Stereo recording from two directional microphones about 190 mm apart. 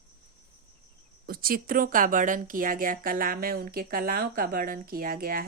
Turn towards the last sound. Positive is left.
turn(degrees=-50)  # may be behind; listen again after turning